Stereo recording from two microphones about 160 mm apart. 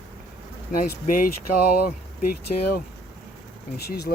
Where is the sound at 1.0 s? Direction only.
60° left (ahead or behind).